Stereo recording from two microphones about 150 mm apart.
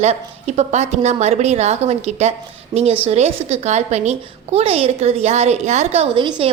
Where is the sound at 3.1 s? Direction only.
45° right (ahead or behind).